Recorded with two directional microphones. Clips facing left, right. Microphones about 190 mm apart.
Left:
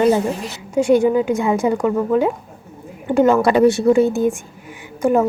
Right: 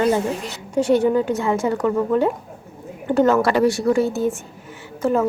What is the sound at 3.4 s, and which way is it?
A woman's voice, 20° left (ahead or behind).